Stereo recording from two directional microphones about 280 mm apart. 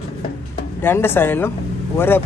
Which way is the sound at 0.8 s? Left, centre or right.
Centre.